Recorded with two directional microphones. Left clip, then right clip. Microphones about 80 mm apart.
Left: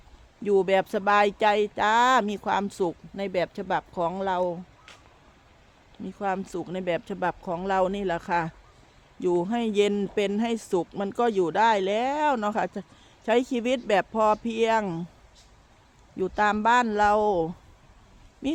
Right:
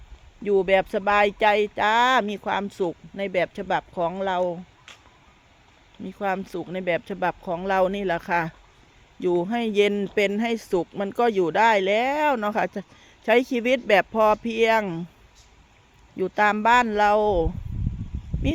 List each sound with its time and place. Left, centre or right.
0.4 s speech: centre
6.1 s speech: centre
6.4 s speech: centre
16.1 s speech: centre